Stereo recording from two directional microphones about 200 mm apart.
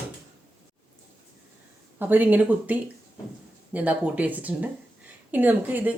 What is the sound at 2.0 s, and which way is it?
A woman's voice, 10° right (ahead or behind).